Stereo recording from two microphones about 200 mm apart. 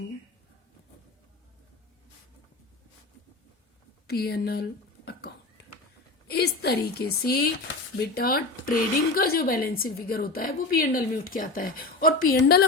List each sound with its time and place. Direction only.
4.0 s speech: 50° left (ahead or behind)